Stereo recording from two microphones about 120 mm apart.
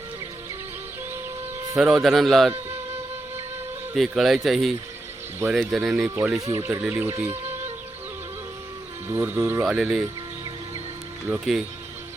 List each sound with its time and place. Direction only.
1.7 s speech: centre (ahead or behind)
3.9 s speech: centre (ahead or behind)
6.1 s speech: 25° right (ahead or behind)
6.8 s speech: 10° right (ahead or behind)
7.1 s speech: 25° right (ahead or behind)
9.0 s speech: 25° right (ahead or behind)
9.6 s speech: centre (ahead or behind)
11.3 s speech: 15° right (ahead or behind)